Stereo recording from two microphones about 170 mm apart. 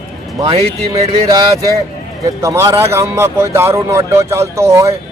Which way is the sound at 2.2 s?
15° right (ahead or behind).